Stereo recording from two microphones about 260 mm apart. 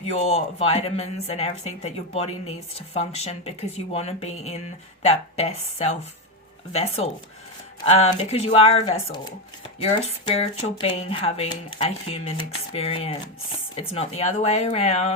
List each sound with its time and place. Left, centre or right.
0.0 s speech: left